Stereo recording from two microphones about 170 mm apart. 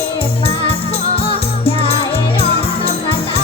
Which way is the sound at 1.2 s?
35° left (ahead or behind).